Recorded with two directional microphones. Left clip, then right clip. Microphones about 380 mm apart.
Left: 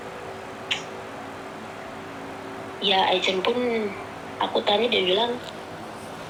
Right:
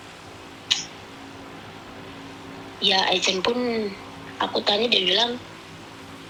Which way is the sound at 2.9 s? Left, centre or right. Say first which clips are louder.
Even; right.